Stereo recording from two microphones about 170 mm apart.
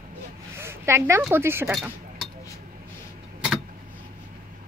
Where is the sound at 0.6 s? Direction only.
15° right (ahead or behind).